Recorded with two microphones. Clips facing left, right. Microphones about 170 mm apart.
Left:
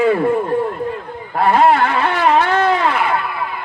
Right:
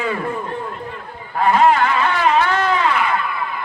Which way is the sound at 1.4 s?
40° left (ahead or behind).